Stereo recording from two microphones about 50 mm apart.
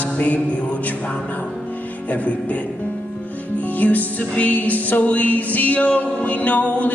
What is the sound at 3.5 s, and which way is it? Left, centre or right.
Music, left.